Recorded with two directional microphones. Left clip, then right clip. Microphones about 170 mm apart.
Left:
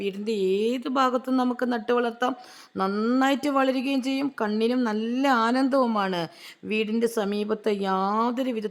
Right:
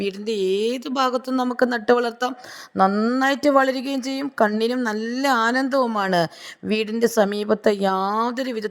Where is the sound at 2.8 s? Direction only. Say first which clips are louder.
Right 2 dB; 20° right (ahead or behind).